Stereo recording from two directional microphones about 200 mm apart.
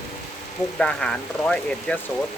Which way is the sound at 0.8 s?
5° left (ahead or behind).